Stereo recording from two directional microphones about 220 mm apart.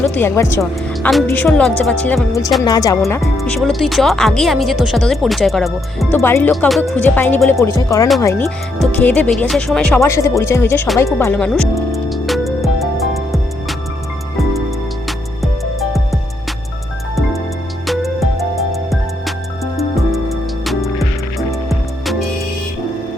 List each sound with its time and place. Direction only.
0.0 s speech: 10° left (ahead or behind)
3.2 s speech: centre (ahead or behind)
6.1 s speech: 10° left (ahead or behind)
10.9 s music: 15° left (ahead or behind)
17.8 s music: centre (ahead or behind)